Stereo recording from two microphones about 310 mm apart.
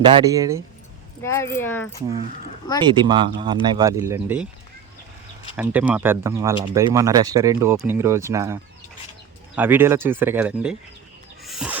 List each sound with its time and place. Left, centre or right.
0.0 s speech: centre
1.2 s speech: centre
2.8 s speech: centre
5.5 s speech: centre
9.6 s speech: centre
11.4 s music: centre